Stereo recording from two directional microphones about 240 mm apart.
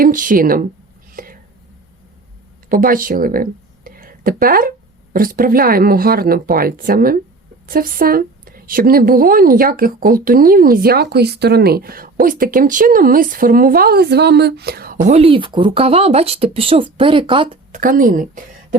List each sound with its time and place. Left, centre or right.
0.0 s a woman's voice: right
1.1 s a sound: right
2.6 s a woman's voice: right